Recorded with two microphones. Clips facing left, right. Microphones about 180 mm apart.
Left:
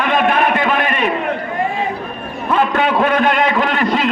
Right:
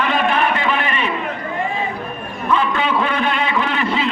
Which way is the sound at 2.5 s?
55° left (ahead or behind).